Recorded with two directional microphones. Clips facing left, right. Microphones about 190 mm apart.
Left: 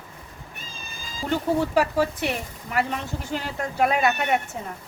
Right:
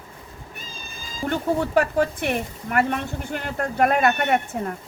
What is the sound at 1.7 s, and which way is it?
Speech, 55° right (ahead or behind).